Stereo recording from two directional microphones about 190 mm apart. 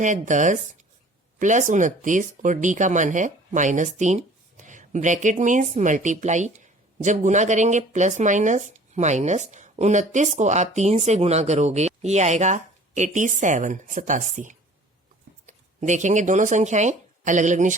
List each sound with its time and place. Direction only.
0.0 s speech: 40° right (ahead or behind)